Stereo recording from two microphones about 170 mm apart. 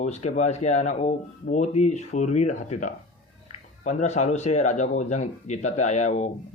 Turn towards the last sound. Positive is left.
turn(degrees=45)  # may be behind; listen again after turning